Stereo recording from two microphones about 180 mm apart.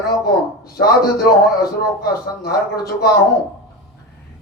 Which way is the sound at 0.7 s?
55° left (ahead or behind).